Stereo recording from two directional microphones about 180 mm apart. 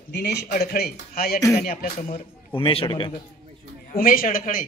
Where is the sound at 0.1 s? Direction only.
65° left (ahead or behind).